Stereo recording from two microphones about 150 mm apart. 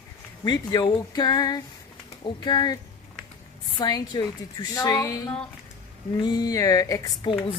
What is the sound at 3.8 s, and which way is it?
A woman's voice, 30° left (ahead or behind).